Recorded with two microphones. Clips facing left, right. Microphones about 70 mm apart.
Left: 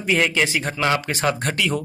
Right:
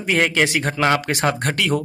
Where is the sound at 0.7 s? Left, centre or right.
Right.